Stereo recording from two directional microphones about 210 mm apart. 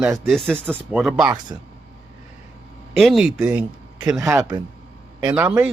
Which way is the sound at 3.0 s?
Centre (ahead or behind).